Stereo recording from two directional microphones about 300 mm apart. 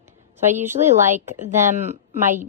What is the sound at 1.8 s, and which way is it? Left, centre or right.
Speech, right.